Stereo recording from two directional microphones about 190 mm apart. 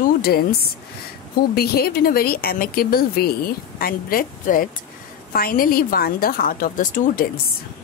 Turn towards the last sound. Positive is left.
turn(degrees=45)  # may be behind; listen again after turning